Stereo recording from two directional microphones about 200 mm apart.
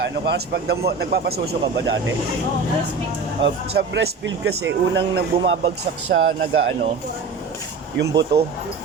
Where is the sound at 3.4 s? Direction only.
60° right (ahead or behind).